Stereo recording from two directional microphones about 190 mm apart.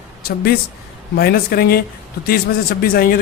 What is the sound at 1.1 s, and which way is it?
A man's voice, 55° left (ahead or behind).